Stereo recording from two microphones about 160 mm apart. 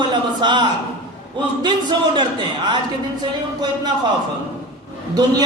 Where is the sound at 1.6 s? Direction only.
30° right (ahead or behind).